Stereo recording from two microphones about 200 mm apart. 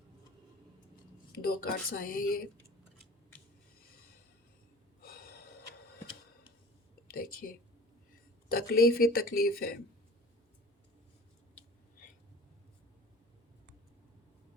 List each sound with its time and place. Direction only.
1.4 s speech: 50° left (ahead or behind)
5.0 s gasp: 50° left (ahead or behind)
7.1 s speech: 45° left (ahead or behind)